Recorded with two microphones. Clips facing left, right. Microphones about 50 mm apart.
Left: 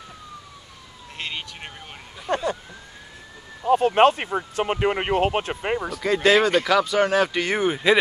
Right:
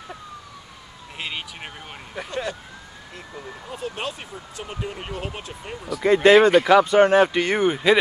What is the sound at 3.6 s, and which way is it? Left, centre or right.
Speech, left.